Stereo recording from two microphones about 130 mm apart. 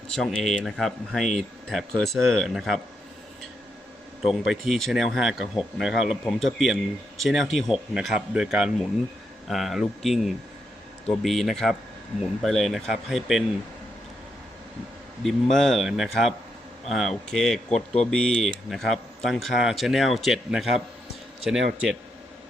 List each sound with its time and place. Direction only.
0.1 s speech: 5° left (ahead or behind)
4.3 s speech: centre (ahead or behind)
15.2 s speech: centre (ahead or behind)
17.7 s speech: 60° left (ahead or behind)
18.1 s speech: 5° left (ahead or behind)